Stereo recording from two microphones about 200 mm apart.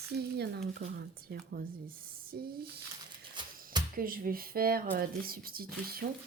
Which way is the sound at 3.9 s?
45° right (ahead or behind).